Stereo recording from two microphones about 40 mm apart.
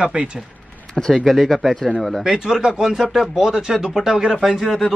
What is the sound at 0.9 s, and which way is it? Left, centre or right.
Speech, centre.